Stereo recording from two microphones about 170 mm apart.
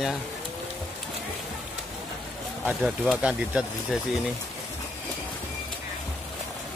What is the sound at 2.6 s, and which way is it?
Speech, centre (ahead or behind).